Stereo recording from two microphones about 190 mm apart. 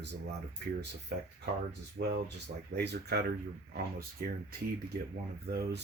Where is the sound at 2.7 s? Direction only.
60° right (ahead or behind).